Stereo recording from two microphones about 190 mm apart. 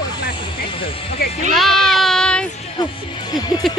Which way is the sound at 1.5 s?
Centre (ahead or behind).